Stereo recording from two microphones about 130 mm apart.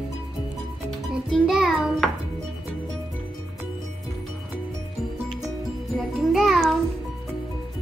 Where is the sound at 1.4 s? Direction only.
5° right (ahead or behind).